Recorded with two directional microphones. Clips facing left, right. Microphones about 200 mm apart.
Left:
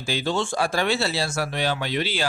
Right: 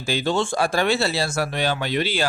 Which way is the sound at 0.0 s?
50° right (ahead or behind).